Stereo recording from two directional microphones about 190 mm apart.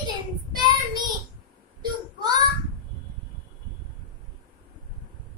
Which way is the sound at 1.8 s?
20° right (ahead or behind).